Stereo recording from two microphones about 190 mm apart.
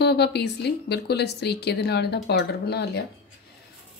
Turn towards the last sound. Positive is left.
turn(degrees=60)  # may be behind; listen again after turning